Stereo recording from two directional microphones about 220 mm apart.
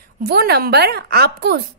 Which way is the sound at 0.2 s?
45° right (ahead or behind).